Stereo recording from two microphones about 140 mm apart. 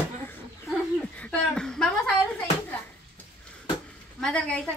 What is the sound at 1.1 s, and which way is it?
Speech, 5° left (ahead or behind).